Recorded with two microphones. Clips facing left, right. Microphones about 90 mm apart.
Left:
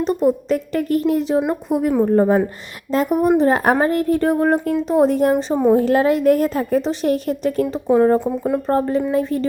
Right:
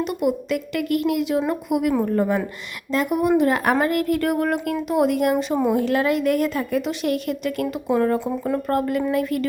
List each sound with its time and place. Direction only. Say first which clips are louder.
0.0 s a woman's voice: left 5 dB; 35° left (ahead or behind)